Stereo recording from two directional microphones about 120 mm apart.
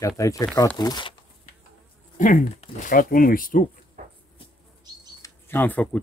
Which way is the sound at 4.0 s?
90° right.